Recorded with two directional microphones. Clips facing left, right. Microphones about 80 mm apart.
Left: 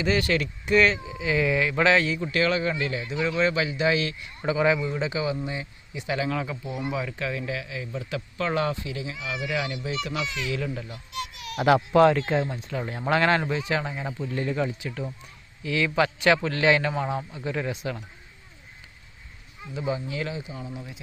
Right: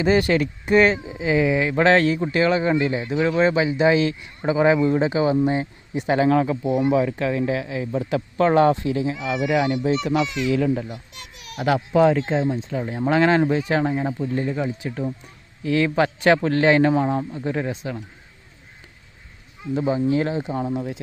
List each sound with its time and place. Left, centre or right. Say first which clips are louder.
0.2 s speech: right 5 dB; right
0.7 s speech: right 4 dB; right
1.4 s speech: right 3 dB; right
1.7 s a man's voice: right 5 dB; right
2.2 s a man's voice: right 5 dB; right
10.6 s speech: right 10 dB; centre
11.6 s speech: even; centre
12.0 s speech: right 2 dB; centre
13.5 s a man's voice: right 7 dB; right
14.3 s speech: left 1 dB; right
14.8 s a man's voice: right 6 dB; right
19.7 s a man's voice: right 9 dB; right
20.6 s speech: right 12 dB; right